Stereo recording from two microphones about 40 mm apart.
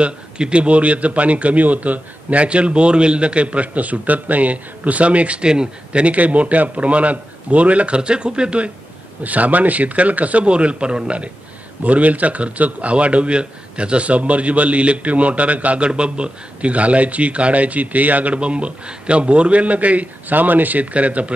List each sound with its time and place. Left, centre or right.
0.0 s a man's voice: right
5.4 s speech: right
6.0 s a man's voice: right
9.2 s a man's voice: right
11.8 s a man's voice: right